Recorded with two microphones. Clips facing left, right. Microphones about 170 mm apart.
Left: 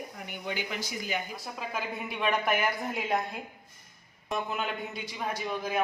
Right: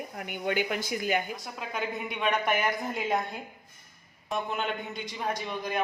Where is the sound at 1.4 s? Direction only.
5° left (ahead or behind).